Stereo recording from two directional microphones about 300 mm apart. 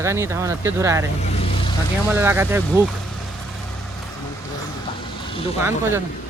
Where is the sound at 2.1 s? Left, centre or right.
Centre.